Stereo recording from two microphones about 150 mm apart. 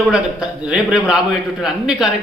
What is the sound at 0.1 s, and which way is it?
A man's voice, 5° right (ahead or behind).